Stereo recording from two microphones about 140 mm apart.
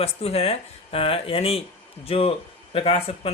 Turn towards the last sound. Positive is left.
turn(degrees=45)  # may be behind; listen again after turning